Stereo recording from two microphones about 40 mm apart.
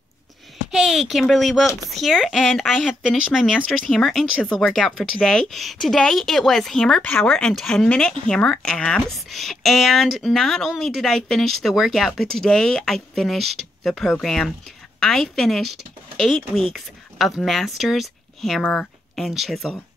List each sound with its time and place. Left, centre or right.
0.7 s speech: centre
4.0 s speech: centre
5.2 s speech: centre
9.3 s speech: centre
17.7 s speech: centre
19.1 s speech: centre